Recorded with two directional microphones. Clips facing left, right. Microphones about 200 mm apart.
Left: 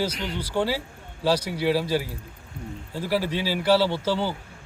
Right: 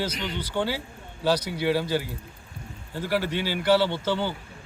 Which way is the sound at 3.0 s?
5° left (ahead or behind).